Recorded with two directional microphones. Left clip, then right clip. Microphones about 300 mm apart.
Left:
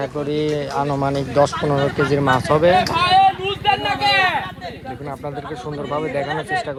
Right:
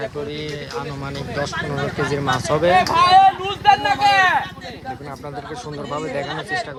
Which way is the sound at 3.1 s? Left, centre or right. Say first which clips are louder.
Right 1 dB; right.